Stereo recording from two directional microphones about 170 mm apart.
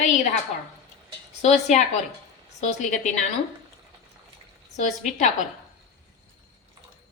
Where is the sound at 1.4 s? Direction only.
45° left (ahead or behind).